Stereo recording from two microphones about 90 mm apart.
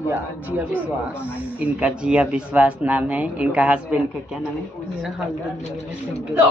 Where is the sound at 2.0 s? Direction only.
10° right (ahead or behind).